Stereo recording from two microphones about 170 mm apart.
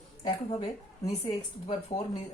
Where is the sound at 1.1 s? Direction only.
40° left (ahead or behind).